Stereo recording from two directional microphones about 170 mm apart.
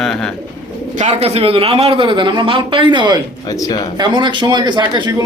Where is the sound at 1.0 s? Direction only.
40° right (ahead or behind).